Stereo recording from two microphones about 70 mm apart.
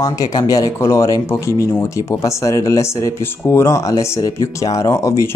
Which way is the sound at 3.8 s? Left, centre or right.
Left.